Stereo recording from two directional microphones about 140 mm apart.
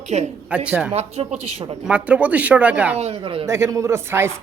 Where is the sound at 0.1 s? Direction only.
50° right (ahead or behind).